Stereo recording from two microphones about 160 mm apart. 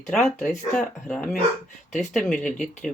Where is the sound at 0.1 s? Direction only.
5° left (ahead or behind).